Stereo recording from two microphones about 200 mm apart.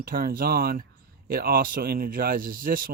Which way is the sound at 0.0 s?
45° right (ahead or behind).